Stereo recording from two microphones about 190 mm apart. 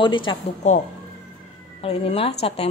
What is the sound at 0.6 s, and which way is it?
A woman's voice, 40° left (ahead or behind).